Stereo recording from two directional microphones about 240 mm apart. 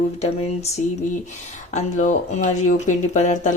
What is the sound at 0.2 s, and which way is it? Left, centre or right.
Speech, left.